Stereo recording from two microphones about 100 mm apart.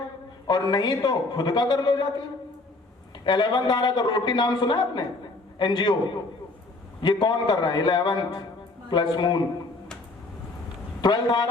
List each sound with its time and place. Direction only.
0.4 s a man's voice: 45° left (ahead or behind)
3.2 s a man's voice: 50° left (ahead or behind)
7.0 s a man's voice: 45° left (ahead or behind)
11.0 s a man's voice: 50° left (ahead or behind)